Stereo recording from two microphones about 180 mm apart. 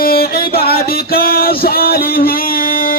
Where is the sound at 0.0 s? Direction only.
55° left (ahead or behind).